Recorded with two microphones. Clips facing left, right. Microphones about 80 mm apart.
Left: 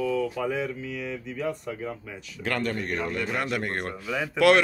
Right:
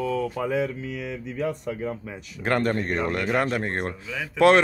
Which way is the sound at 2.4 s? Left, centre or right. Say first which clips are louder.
Right 5 dB; right.